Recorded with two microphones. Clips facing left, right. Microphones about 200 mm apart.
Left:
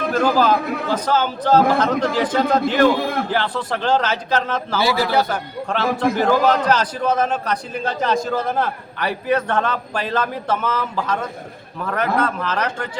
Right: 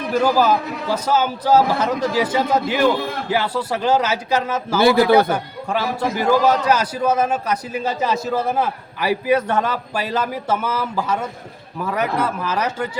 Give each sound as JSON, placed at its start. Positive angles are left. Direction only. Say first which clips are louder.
{"t": 0.1, "sound": "a man's voice", "louder": "right 1 dB", "side_deg": -10}
{"t": 4.8, "sound": "a man's voice", "louder": "right 6 dB", "side_deg": -55}
{"t": 5.3, "sound": "a man's voice", "louder": "right 2 dB", "side_deg": -10}